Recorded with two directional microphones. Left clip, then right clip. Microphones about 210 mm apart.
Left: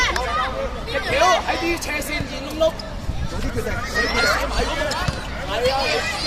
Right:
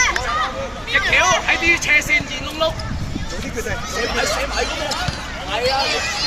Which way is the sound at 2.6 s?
45° left (ahead or behind).